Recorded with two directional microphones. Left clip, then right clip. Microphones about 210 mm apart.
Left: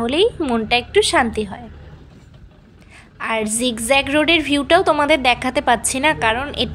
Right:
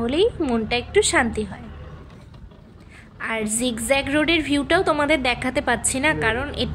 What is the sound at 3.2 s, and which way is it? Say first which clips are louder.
A woman's voice: left 4 dB; 15° left (ahead or behind).